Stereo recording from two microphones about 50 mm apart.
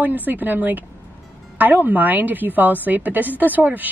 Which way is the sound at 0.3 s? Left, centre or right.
Right.